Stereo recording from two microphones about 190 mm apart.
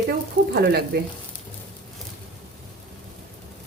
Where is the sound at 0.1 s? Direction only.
55° right (ahead or behind).